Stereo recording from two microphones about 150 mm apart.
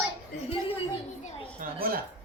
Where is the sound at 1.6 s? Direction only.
65° right (ahead or behind).